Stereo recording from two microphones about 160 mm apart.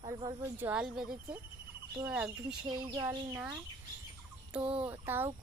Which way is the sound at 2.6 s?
25° right (ahead or behind).